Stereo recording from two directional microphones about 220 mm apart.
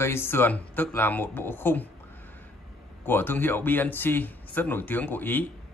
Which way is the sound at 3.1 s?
10° left (ahead or behind).